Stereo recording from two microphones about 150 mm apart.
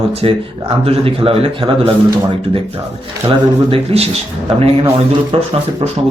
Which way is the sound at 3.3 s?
40° right (ahead or behind).